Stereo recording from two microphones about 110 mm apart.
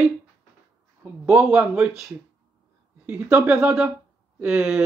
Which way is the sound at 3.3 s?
15° right (ahead or behind).